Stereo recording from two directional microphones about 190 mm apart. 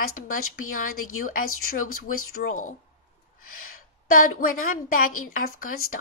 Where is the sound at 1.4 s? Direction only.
90° left.